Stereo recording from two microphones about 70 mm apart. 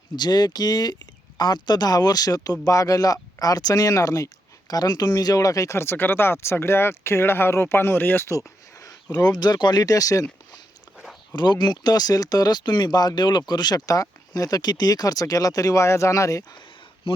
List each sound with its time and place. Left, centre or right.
0.2 s speech: left
4.7 s speech: left
8.3 s a sound: left
9.1 s speech: left
11.3 s speech: left